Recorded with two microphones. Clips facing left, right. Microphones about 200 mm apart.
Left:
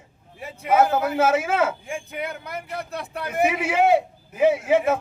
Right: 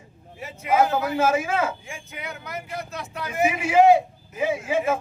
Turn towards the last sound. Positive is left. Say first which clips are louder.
# left 5 dB
turn(degrees=65)  # may be behind; listen again after turning